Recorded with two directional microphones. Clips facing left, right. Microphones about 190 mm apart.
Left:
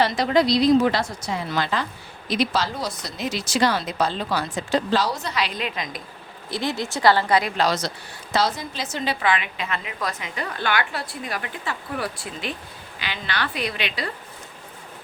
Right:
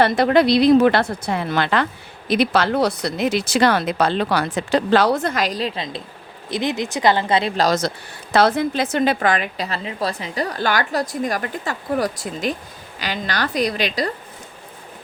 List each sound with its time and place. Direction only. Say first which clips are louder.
0.0 s speech: right 4 dB; 55° right (ahead or behind); by 6.0 s 30° right (ahead or behind)
6.5 s speech: right 4 dB; 20° right (ahead or behind)
7.5 s a woman's voice: right 4 dB; 45° right (ahead or behind)